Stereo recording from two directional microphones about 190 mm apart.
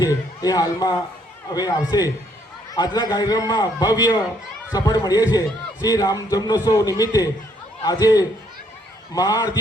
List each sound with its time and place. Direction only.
0.0 s a man's voice: 20° left (ahead or behind)